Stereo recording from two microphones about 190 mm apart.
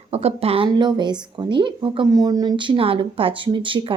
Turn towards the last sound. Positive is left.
turn(degrees=-25)  # may be behind; listen again after turning